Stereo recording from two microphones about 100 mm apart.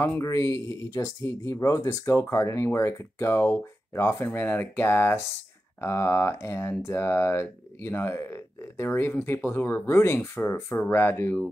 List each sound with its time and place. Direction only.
0.2 s speech: 30° left (ahead or behind)